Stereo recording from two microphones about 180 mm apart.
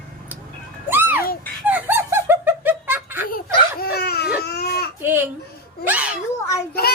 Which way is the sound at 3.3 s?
55° left (ahead or behind).